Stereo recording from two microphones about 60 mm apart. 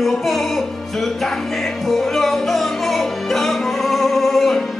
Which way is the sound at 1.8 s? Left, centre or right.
Centre.